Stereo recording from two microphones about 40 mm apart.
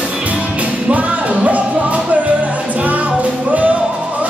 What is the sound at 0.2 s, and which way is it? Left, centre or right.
Music, right.